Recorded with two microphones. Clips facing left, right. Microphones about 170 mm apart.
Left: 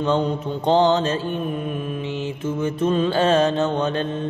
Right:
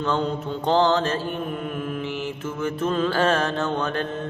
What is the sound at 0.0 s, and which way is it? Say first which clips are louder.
Mantra: left 3 dB; 20° left (ahead or behind).